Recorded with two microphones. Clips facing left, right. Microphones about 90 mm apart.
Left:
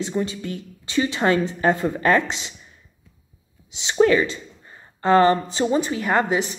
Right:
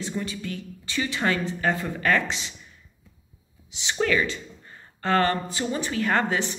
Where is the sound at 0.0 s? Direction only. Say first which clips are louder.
Left 6 dB; 25° left (ahead or behind).